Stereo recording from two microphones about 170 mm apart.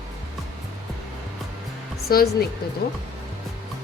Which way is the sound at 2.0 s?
60° left (ahead or behind).